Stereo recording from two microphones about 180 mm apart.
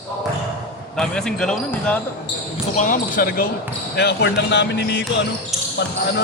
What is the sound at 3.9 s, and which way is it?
Speech, 70° left (ahead or behind).